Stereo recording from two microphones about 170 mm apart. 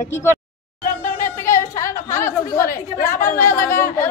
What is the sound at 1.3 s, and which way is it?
A woman's voice, 15° left (ahead or behind).